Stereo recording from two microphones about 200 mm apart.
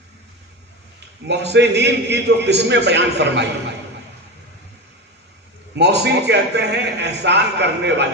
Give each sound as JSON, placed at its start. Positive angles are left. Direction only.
{"t": 1.3, "sound": "a man's voice", "side_deg": -60}
{"t": 5.7, "sound": "a man's voice", "side_deg": -60}